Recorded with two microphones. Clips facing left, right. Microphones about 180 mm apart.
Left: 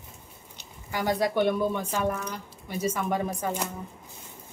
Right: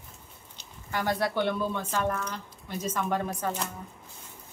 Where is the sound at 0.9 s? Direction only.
15° left (ahead or behind).